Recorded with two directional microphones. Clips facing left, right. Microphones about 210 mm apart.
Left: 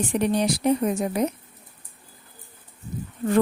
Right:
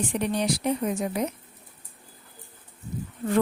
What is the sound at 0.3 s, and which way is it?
Speech, 40° left (ahead or behind).